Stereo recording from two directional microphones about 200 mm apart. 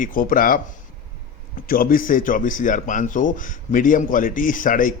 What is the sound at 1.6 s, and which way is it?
Speech, 45° left (ahead or behind).